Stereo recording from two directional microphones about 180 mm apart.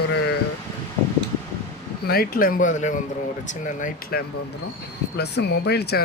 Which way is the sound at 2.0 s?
55° left (ahead or behind).